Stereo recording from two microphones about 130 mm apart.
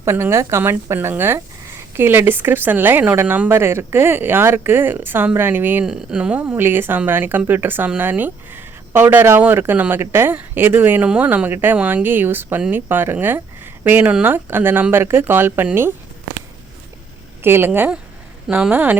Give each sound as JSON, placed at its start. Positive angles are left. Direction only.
{"t": 0.0, "sound": "a woman's voice", "side_deg": -20}
{"t": 5.8, "sound": "speech", "side_deg": -5}
{"t": 17.4, "sound": "speech", "side_deg": -15}